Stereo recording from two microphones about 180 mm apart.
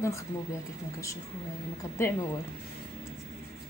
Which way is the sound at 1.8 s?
15° left (ahead or behind).